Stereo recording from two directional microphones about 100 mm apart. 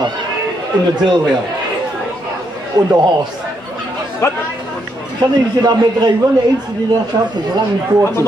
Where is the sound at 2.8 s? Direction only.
45° right (ahead or behind).